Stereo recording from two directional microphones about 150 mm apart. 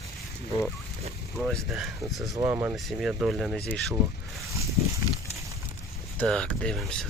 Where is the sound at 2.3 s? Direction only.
20° right (ahead or behind).